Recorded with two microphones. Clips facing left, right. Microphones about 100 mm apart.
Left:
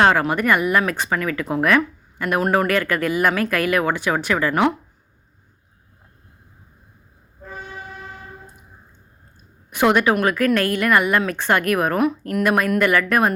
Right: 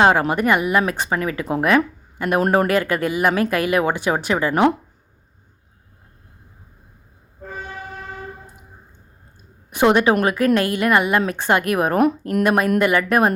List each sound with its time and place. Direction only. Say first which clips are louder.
0.0 s speech: right 1 dB; 20° right (ahead or behind)
2.6 s speech: right 1 dB; 20° right (ahead or behind)
9.6 s speech: right 2 dB; 25° right (ahead or behind)